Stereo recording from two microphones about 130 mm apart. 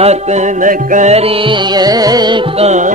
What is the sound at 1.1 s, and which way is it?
Music, 50° right (ahead or behind).